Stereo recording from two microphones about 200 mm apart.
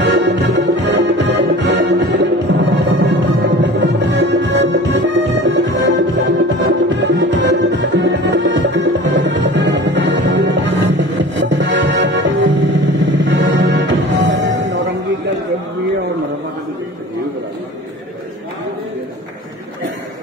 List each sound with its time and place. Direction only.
0.0 s music: 60° right (ahead or behind)